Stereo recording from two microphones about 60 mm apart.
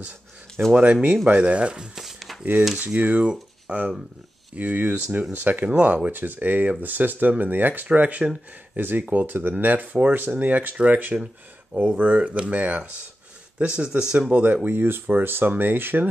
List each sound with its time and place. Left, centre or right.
0.6 s speech: right
2.0 s a sound: centre
2.8 s speech: right
11.7 s speech: right